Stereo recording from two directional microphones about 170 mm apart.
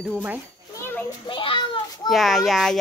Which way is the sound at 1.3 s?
30° left (ahead or behind).